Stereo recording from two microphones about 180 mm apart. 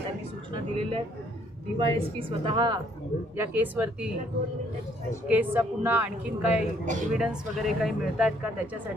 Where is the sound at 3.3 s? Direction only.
10° right (ahead or behind).